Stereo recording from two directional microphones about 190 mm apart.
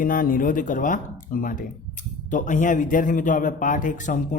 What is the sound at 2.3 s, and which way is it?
A man's voice, 40° left (ahead or behind).